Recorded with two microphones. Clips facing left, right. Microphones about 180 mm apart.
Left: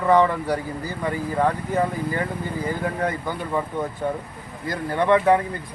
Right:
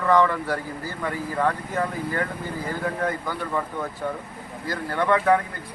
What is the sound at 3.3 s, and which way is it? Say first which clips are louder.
Speech: left 2 dB; 15° left (ahead or behind).